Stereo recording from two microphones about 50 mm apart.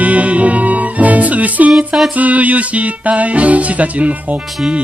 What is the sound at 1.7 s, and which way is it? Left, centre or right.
Music, centre.